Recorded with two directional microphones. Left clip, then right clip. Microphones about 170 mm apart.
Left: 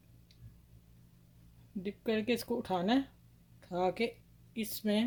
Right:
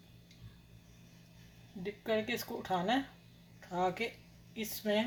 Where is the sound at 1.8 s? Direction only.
90° left.